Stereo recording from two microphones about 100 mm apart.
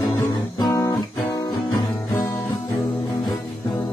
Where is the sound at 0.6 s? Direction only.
35° left (ahead or behind).